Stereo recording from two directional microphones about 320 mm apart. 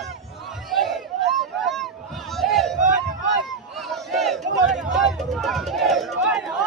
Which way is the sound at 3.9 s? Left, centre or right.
Centre.